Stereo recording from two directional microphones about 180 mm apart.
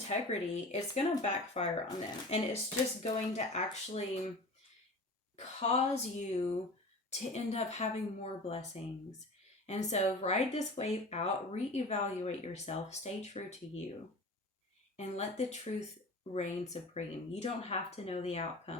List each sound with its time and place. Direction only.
0.1 s speech: 35° left (ahead or behind)
5.4 s speech: 35° left (ahead or behind)
14.9 s speech: 40° left (ahead or behind)